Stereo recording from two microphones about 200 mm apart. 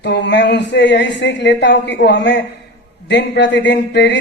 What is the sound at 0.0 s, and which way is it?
A woman's voice, 60° left (ahead or behind).